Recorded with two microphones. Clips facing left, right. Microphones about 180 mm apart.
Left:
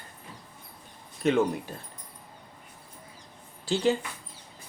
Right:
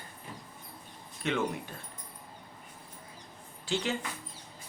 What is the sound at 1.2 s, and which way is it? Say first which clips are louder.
Speech: left 8 dB; 40° left (ahead or behind).